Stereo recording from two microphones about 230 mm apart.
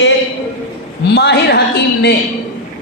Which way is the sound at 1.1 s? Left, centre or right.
Left.